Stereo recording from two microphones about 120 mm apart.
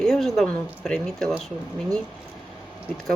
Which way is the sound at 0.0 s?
5° left (ahead or behind).